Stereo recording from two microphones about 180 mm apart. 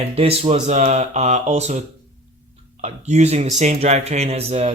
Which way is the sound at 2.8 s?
35° right (ahead or behind).